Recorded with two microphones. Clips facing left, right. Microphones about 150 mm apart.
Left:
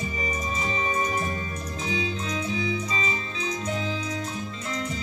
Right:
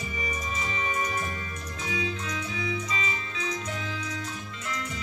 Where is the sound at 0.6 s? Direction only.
30° left (ahead or behind).